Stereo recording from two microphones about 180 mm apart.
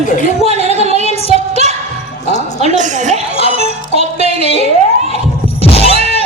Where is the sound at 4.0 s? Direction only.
40° right (ahead or behind).